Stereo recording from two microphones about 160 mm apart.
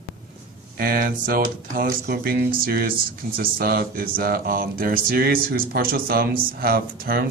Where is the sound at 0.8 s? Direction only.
65° right (ahead or behind).